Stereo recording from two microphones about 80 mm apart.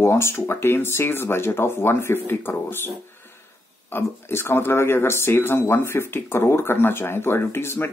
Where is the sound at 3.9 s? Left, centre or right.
Left.